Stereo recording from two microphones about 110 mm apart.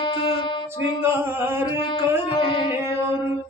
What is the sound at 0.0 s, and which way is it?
Music, 45° left (ahead or behind).